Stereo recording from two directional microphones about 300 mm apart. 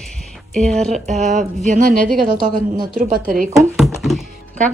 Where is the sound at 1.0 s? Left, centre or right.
Right.